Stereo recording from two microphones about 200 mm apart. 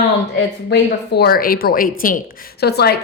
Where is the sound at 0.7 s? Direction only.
55° left (ahead or behind).